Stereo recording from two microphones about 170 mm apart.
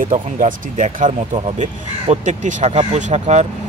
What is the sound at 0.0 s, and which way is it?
Speech, 50° right (ahead or behind).